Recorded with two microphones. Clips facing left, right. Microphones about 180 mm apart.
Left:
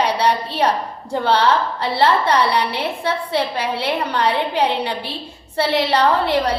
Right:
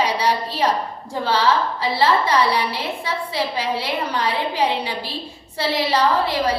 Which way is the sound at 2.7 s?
65° left (ahead or behind).